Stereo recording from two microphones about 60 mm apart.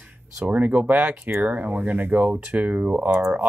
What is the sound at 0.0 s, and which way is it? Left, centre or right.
Speech, right.